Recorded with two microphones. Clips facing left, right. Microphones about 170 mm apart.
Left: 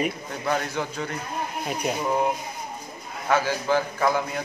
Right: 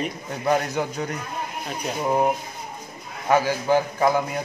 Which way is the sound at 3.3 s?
15° right (ahead or behind).